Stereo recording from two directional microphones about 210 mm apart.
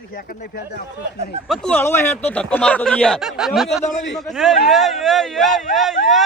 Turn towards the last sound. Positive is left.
turn(degrees=0)  # may be behind; listen again after turning